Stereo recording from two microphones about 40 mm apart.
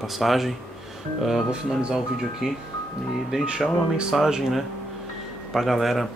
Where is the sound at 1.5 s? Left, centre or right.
Right.